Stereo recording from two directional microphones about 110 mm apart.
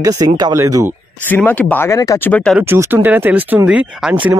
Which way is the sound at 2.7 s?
20° right (ahead or behind).